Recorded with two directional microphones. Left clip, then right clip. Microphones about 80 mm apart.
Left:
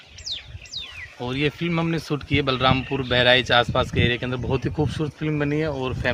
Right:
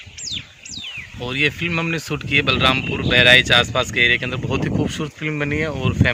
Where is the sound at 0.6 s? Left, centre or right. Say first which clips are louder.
Right 1 dB; centre.